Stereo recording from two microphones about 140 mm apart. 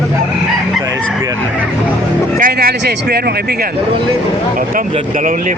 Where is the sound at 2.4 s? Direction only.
90° right.